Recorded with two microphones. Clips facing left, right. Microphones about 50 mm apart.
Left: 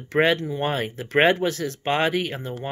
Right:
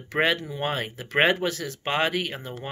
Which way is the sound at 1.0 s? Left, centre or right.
Centre.